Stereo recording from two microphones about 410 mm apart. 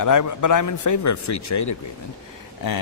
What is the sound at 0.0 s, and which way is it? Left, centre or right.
Speech, left.